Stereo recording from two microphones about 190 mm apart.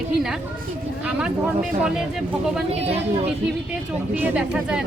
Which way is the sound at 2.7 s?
30° right (ahead or behind).